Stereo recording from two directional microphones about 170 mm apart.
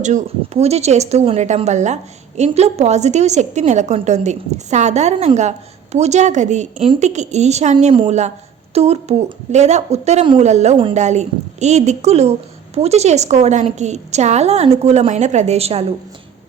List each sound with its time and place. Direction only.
0.0 s speech: 40° right (ahead or behind)